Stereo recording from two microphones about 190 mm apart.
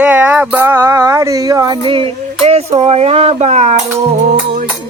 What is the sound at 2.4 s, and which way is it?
Child singing, 35° right (ahead or behind).